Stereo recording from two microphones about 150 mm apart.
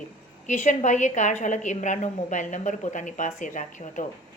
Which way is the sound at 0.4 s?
55° left (ahead or behind).